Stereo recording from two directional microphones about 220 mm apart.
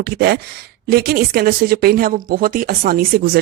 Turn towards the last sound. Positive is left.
turn(degrees=-40)  # may be behind; listen again after turning